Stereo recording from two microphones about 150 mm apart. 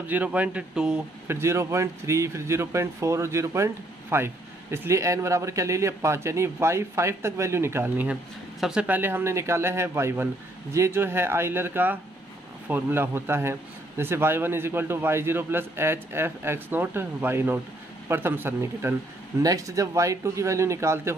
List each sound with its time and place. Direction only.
0.1 s speech: 10° right (ahead or behind)
1.2 s speech: 15° right (ahead or behind)